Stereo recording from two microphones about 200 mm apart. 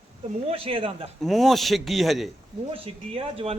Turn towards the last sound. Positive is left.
turn(degrees=-30)  # may be behind; listen again after turning